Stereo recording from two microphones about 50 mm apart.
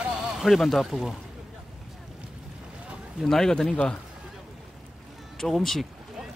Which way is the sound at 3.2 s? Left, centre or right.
Centre.